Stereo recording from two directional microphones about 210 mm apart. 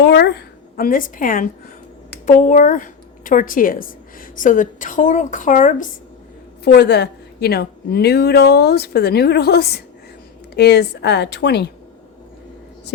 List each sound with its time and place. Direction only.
0.0 s a woman's voice: 50° left (ahead or behind)
6.7 s a woman's voice: 55° left (ahead or behind)